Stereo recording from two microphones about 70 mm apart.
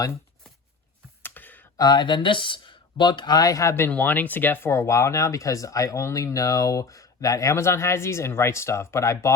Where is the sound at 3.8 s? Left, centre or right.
Left.